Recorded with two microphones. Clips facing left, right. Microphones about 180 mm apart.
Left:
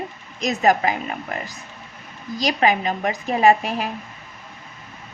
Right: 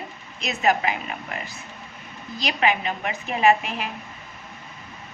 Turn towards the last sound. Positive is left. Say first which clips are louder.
# left 3 dB
turn(degrees=40)  # may be behind; listen again after turning